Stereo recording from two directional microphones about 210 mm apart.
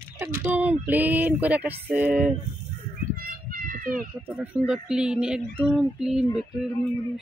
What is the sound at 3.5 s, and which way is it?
Children playing, 45° right (ahead or behind).